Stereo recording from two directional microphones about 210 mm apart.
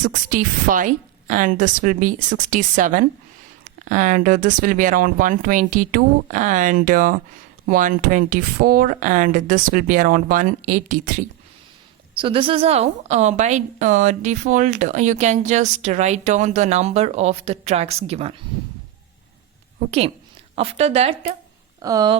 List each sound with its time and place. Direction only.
0.0 s a woman's voice: 40° right (ahead or behind)
12.1 s a woman's voice: 25° right (ahead or behind)
20.6 s speech: 30° right (ahead or behind)
21.8 s speech: 15° right (ahead or behind)